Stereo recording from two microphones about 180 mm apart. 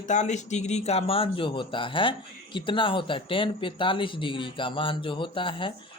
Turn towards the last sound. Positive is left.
turn(degrees=30)  # may be behind; listen again after turning